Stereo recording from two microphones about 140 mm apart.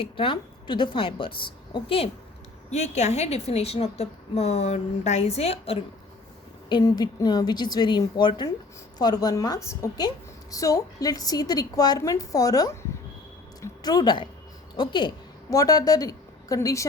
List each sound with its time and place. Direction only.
0.0 s a woman's voice: 40° left (ahead or behind)
2.7 s a woman's voice: 55° left (ahead or behind)
6.7 s a woman's voice: 30° left (ahead or behind)